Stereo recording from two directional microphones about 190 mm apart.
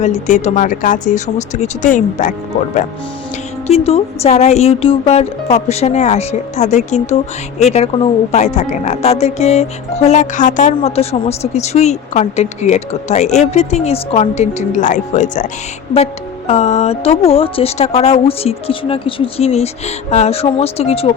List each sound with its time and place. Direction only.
0.0 s speech: 40° left (ahead or behind)
3.7 s speech: 30° left (ahead or behind)
16.5 s speech: 35° left (ahead or behind)